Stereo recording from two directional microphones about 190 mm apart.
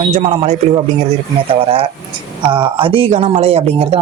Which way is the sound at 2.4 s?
25° right (ahead or behind).